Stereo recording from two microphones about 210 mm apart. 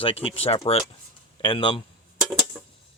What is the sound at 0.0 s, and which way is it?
Speech, 25° left (ahead or behind).